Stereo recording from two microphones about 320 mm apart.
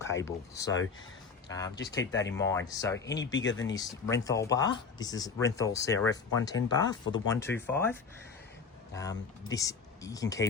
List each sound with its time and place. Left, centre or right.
0.0 s speech: centre
3.3 s speech: left
3.8 s speech: centre
9.0 s speech: centre